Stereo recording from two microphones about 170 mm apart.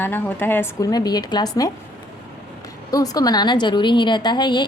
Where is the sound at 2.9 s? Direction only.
20° left (ahead or behind).